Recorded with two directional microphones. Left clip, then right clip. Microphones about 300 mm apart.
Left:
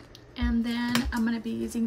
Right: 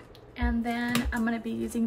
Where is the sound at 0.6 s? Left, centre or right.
Right.